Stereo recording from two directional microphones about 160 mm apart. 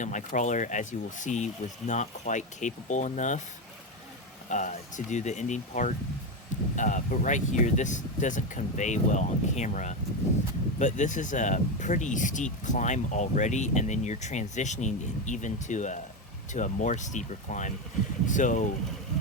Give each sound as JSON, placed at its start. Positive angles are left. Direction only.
{"t": 0.0, "sound": "speech", "side_deg": 50}
{"t": 4.4, "sound": "speech", "side_deg": 50}